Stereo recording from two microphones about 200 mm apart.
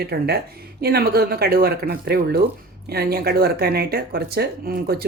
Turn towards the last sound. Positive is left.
turn(degrees=-50)  # may be behind; listen again after turning